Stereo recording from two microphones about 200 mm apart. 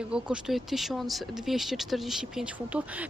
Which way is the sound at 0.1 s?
5° right (ahead or behind).